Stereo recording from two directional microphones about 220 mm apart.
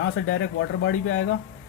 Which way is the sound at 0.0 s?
60° left (ahead or behind).